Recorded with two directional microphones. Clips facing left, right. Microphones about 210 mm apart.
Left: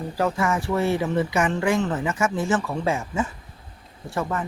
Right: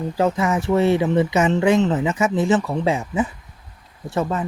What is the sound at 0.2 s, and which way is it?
Speech, 20° right (ahead or behind).